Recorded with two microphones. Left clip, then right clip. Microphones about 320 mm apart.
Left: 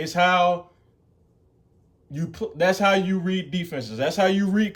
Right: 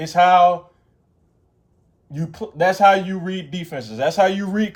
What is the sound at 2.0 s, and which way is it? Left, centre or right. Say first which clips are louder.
A man's voice: even; centre.